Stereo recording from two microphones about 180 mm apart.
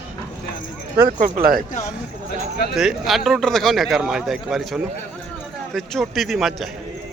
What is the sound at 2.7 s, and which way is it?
Speech, centre (ahead or behind).